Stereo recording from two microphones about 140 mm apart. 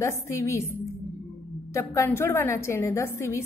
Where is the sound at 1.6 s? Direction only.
20° left (ahead or behind).